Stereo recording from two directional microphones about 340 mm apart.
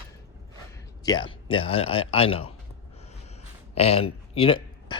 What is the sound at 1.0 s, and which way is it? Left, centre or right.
A man's voice, centre.